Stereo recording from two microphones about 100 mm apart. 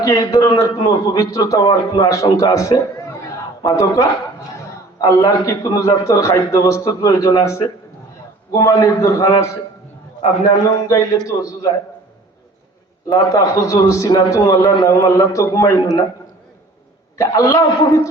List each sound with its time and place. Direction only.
0.0 s a man's voice: 35° left (ahead or behind)
13.1 s a man's voice: 35° left (ahead or behind)
14.6 s a man's voice: 45° left (ahead or behind)
14.8 s a man's voice: 30° left (ahead or behind)
17.2 s a man's voice: 35° left (ahead or behind)